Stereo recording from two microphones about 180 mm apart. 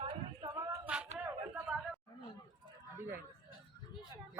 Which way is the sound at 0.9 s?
10° right (ahead or behind).